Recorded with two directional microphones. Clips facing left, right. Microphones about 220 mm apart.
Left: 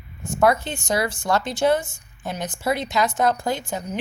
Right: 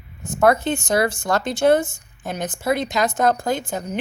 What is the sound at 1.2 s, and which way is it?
Speech, 45° right (ahead or behind).